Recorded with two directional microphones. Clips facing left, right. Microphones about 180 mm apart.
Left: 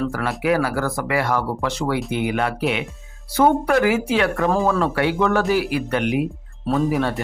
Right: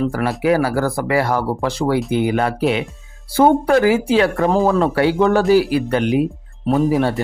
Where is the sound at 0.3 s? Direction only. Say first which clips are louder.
Right 3 dB; 35° right (ahead or behind).